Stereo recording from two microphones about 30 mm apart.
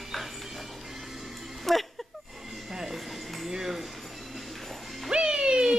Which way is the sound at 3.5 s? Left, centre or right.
Centre.